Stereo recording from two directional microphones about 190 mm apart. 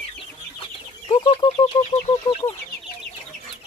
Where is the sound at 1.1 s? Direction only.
25° left (ahead or behind).